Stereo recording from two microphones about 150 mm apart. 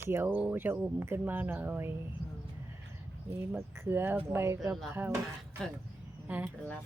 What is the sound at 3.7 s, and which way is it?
Speech, 15° right (ahead or behind).